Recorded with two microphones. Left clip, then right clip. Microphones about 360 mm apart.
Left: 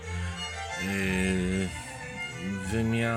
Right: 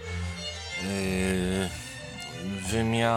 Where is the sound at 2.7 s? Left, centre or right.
Right.